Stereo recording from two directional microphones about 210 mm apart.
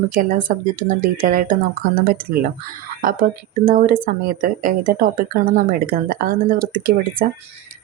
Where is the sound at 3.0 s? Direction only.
40° right (ahead or behind).